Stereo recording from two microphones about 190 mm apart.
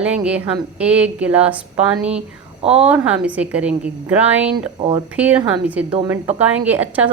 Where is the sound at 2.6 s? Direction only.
30° right (ahead or behind).